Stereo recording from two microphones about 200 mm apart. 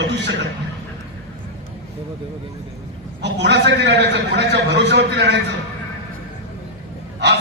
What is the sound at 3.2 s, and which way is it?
A man's voice, 60° right (ahead or behind).